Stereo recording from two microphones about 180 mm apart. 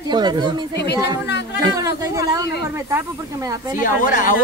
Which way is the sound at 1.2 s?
70° left (ahead or behind).